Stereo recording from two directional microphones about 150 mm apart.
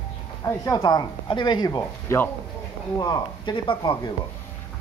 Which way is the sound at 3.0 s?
30° left (ahead or behind).